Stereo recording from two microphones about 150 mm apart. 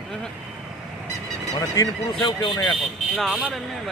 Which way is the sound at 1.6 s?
25° left (ahead or behind).